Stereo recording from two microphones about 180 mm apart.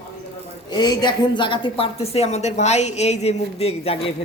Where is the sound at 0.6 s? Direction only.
25° left (ahead or behind).